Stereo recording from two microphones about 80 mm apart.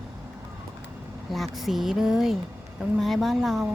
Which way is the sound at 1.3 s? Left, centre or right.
Centre.